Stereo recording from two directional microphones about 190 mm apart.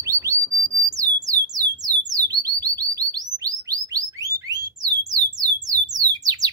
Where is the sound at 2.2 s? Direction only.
20° right (ahead or behind).